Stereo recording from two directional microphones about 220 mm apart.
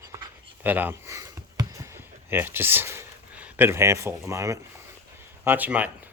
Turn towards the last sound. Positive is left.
turn(degrees=-5)  # may be behind; listen again after turning